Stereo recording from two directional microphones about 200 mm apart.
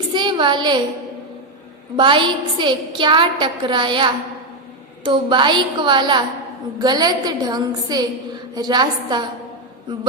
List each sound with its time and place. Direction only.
0.1 s a woman's voice: 25° right (ahead or behind)
2.0 s a woman's voice: 25° right (ahead or behind)